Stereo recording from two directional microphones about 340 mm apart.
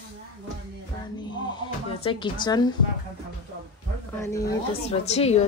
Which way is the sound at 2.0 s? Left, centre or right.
Centre.